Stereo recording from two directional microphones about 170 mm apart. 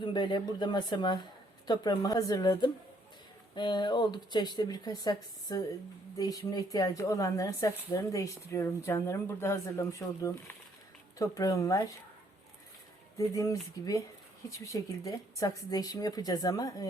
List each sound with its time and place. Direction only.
0.0 s a woman's voice: 25° left (ahead or behind)
13.1 s a woman's voice: 20° left (ahead or behind)